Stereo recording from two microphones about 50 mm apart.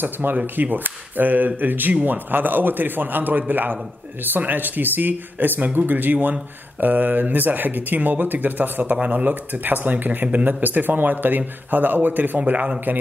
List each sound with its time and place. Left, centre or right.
0.0 s speech: right